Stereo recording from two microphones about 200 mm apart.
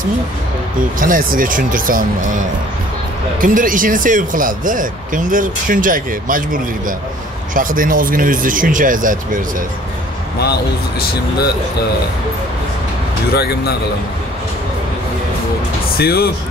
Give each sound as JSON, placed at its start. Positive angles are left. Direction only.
{"t": 0.9, "sound": "speech", "side_deg": -45}
{"t": 3.3, "sound": "speech", "side_deg": -45}
{"t": 10.4, "sound": "speech", "side_deg": 55}
{"t": 13.3, "sound": "speech", "side_deg": 55}
{"t": 16.0, "sound": "speech", "side_deg": 50}